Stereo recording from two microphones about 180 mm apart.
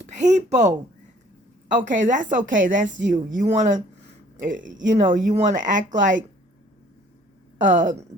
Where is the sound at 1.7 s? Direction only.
45° right (ahead or behind).